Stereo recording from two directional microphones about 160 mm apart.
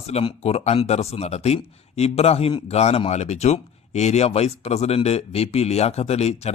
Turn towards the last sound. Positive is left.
turn(degrees=40)  # may be behind; listen again after turning